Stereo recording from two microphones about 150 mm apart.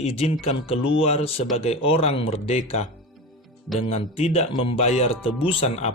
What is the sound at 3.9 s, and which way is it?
Speech, 45° left (ahead or behind).